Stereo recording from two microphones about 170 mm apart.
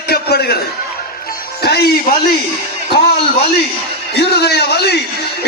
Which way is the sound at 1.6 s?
70° left (ahead or behind).